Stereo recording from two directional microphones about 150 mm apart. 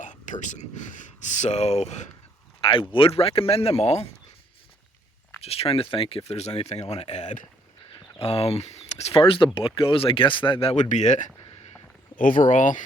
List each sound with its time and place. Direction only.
0.0 s speech: 55° left (ahead or behind)
2.6 s speech: 35° left (ahead or behind)
5.4 s speech: 40° left (ahead or behind)
12.1 s speech: 65° left (ahead or behind)